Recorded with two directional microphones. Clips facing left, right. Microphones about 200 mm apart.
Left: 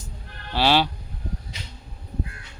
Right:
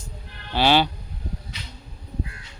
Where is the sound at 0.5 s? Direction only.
Centre (ahead or behind).